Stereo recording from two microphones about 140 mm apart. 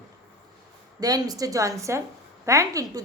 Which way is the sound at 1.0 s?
25° right (ahead or behind).